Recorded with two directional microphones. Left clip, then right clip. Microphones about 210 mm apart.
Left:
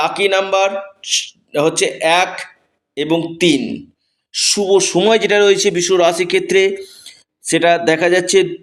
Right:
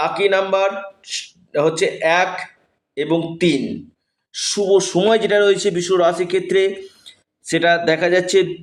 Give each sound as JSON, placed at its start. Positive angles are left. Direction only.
{"t": 0.0, "sound": "a man's voice", "side_deg": 35}